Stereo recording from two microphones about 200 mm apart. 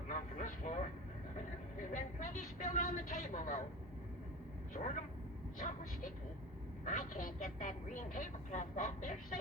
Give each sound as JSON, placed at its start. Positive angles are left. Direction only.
{"t": 0.1, "sound": "vehicle", "side_deg": 40}
{"t": 1.9, "sound": "a sound", "side_deg": 40}
{"t": 5.5, "sound": "speech", "side_deg": 45}